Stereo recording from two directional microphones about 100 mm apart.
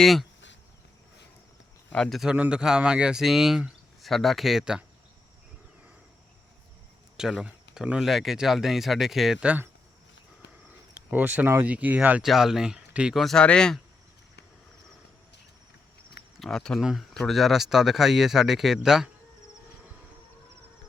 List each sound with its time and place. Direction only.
0.0 s speech: centre (ahead or behind)
1.9 s speech: 5° left (ahead or behind)
2.3 s speech: 10° right (ahead or behind)
7.2 s speech: 5° right (ahead or behind)
11.1 s speech: 15° right (ahead or behind)
12.2 s speech: 5° right (ahead or behind)
13.3 s speech: 10° left (ahead or behind)
16.4 s speech: 5° left (ahead or behind)